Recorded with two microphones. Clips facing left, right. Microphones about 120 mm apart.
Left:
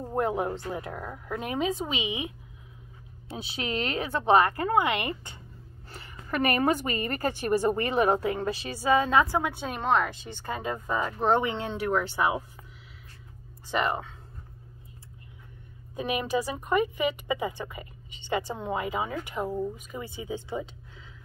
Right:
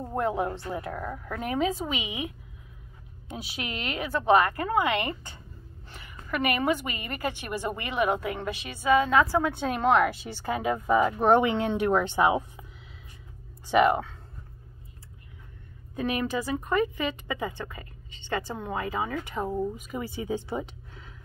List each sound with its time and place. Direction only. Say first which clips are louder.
0.1 s a woman's voice: even; 20° left (ahead or behind)
5.9 s a woman's voice: even; 35° left (ahead or behind)
9.6 s a woman's voice: right 5 dB; centre (ahead or behind); by 12.4 s 20° right (ahead or behind)
13.7 s a woman's voice: right 7 dB; 10° right (ahead or behind)
16.0 s a woman's voice: even; 15° left (ahead or behind)